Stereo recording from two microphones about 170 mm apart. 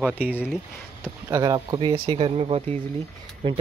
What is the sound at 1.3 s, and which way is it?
Speech, 25° right (ahead or behind).